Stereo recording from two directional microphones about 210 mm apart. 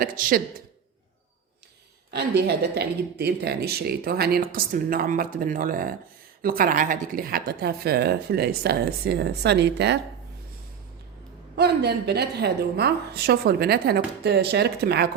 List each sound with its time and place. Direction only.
0.0 s a woman's voice: 40° right (ahead or behind)
2.0 s speech: 50° right (ahead or behind)
11.5 s speech: 50° right (ahead or behind)